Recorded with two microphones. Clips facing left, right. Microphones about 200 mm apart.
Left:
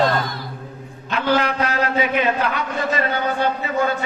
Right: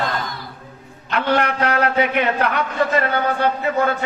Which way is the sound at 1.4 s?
60° right (ahead or behind).